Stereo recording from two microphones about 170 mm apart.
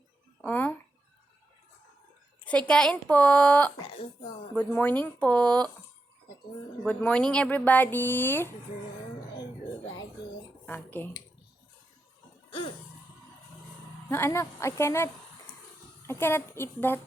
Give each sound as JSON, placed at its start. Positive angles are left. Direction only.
{"t": 0.4, "sound": "a sound", "side_deg": 10}
{"t": 2.4, "sound": "speech", "side_deg": 5}
{"t": 6.8, "sound": "speech", "side_deg": 5}
{"t": 10.7, "sound": "speech", "side_deg": 10}
{"t": 14.1, "sound": "speech", "side_deg": 15}